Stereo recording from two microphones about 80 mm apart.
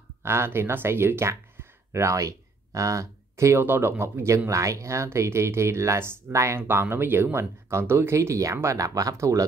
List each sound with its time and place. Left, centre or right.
0.2 s speech: right
3.6 s speech: right